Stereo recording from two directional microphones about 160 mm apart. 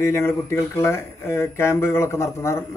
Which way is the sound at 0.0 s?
15° left (ahead or behind).